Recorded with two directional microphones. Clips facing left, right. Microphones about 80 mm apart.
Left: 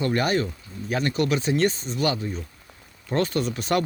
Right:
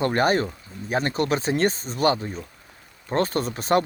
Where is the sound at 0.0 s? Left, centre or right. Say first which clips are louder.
Right 2 dB; right.